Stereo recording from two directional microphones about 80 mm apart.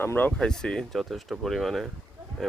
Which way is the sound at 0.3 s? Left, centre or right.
Centre.